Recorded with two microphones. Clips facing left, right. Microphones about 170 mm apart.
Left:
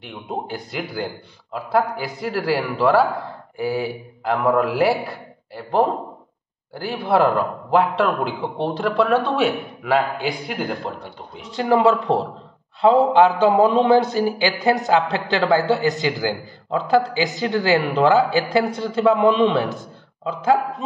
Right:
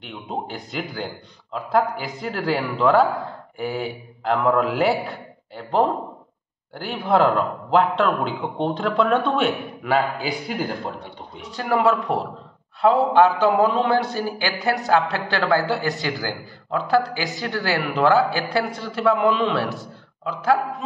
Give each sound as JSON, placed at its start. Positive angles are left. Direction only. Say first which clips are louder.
{"t": 0.3, "sound": "a man's voice", "louder": "left 2 dB", "side_deg": 5}
{"t": 11.5, "sound": "a man's voice", "louder": "left 3 dB", "side_deg": 25}